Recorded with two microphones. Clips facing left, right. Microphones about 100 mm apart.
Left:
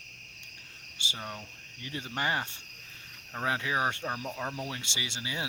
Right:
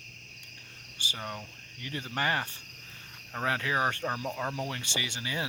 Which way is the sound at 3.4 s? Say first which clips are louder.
Right 1 dB; 15° left (ahead or behind).